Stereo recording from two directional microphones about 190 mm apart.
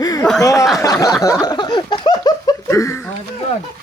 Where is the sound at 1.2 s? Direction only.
20° left (ahead or behind).